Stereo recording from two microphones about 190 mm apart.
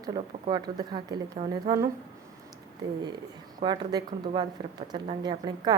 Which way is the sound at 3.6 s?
20° right (ahead or behind).